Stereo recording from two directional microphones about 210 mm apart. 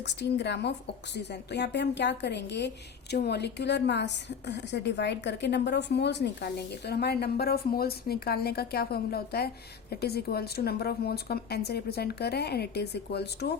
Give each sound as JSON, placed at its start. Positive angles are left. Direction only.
{"t": 0.0, "sound": "a woman's voice", "side_deg": 55}